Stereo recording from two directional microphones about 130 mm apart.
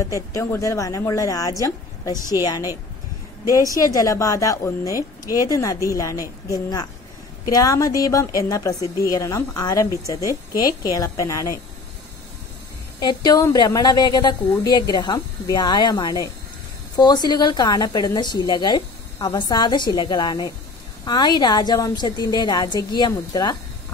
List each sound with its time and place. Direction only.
0.0 s a woman's voice: 25° left (ahead or behind)
13.0 s a woman's voice: 30° left (ahead or behind)